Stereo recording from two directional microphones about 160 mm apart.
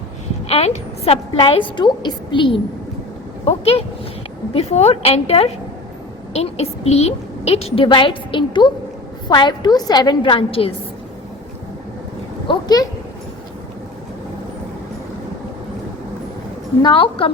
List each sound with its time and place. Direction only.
0.4 s a woman's voice: 40° left (ahead or behind)
12.5 s a woman's voice: 25° left (ahead or behind)
16.8 s a woman's voice: 30° left (ahead or behind)